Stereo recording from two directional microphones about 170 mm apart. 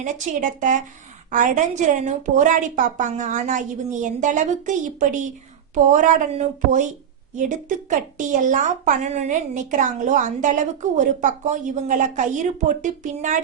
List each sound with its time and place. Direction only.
0.0 s a woman's voice: 45° right (ahead or behind)